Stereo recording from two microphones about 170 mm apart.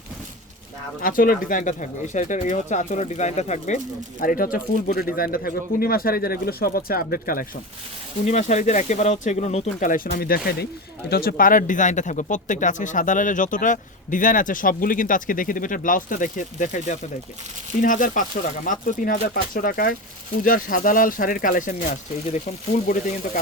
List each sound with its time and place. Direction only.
1.0 s speech: 55° left (ahead or behind)
4.2 s speech: 55° left (ahead or behind)
8.2 s speech: 45° left (ahead or behind)